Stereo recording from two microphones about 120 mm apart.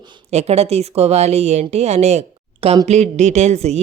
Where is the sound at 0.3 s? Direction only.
65° right (ahead or behind).